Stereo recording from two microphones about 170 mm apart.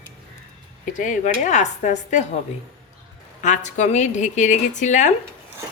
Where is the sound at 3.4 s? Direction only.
45° left (ahead or behind).